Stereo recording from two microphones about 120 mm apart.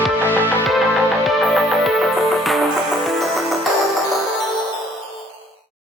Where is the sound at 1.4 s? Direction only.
Centre (ahead or behind).